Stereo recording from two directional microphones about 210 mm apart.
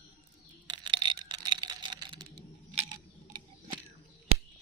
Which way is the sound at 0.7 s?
20° right (ahead or behind).